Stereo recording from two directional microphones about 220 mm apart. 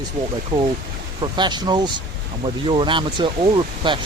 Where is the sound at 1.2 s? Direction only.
20° right (ahead or behind).